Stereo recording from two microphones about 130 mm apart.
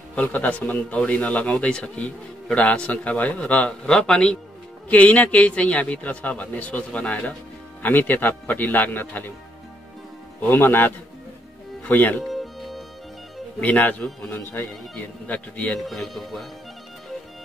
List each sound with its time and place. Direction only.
0.1 s a man's voice: 10° left (ahead or behind)
10.4 s a man's voice: 15° left (ahead or behind)
11.9 s a man's voice: 15° left (ahead or behind)
12.2 s music: centre (ahead or behind)
13.6 s a man's voice: 10° left (ahead or behind)